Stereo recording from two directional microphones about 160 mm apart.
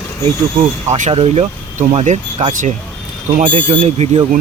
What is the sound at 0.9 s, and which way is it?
Speech, 40° right (ahead or behind).